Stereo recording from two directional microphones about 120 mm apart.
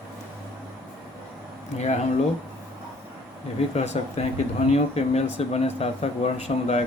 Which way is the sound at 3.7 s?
65° left (ahead or behind).